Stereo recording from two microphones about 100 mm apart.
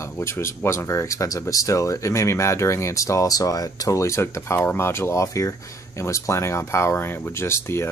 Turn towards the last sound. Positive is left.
turn(degrees=25)  # may be behind; listen again after turning